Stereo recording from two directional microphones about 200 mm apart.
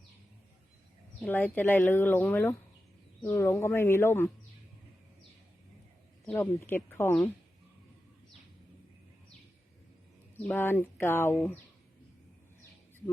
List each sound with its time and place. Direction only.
1.2 s speech: 10° left (ahead or behind)
6.2 s speech: 10° left (ahead or behind)
10.4 s speech: 10° left (ahead or behind)